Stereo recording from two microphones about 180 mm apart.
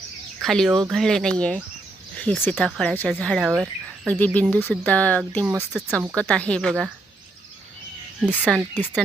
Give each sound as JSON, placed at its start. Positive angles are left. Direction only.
{"t": 0.4, "sound": "speech", "side_deg": 0}
{"t": 5.5, "sound": "speech", "side_deg": -10}
{"t": 6.1, "sound": "speech", "side_deg": 5}
{"t": 8.4, "sound": "speech", "side_deg": -5}
{"t": 8.7, "sound": "speech", "side_deg": 10}